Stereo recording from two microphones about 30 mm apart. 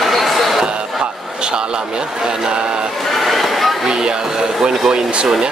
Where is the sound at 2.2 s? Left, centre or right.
Right.